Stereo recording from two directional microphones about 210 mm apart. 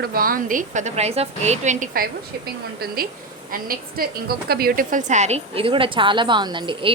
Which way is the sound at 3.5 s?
45° right (ahead or behind).